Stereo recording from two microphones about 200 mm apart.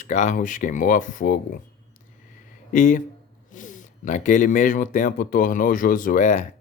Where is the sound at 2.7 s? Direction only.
40° left (ahead or behind).